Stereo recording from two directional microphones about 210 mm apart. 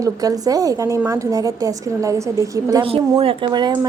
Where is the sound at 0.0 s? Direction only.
15° right (ahead or behind).